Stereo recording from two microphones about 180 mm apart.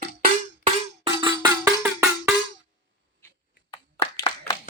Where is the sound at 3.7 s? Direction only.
20° left (ahead or behind).